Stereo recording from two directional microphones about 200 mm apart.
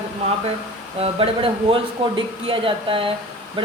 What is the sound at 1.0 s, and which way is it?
Speech, 25° right (ahead or behind).